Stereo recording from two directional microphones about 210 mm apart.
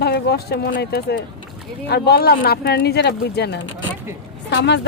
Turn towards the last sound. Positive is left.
turn(degrees=55)  # may be behind; listen again after turning